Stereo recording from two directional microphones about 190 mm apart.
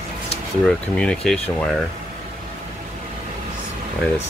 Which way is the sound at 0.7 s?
5° left (ahead or behind).